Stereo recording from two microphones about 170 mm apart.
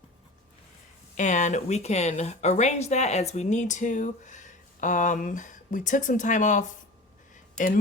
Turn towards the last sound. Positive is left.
turn(degrees=50)  # may be behind; listen again after turning